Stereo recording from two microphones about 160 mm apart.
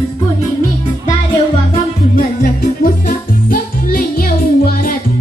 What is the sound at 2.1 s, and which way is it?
Music, 65° left (ahead or behind).